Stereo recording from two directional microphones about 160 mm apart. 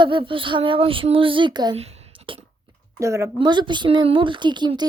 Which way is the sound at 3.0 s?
15° right (ahead or behind).